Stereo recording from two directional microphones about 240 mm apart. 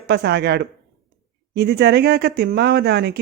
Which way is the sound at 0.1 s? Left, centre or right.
Right.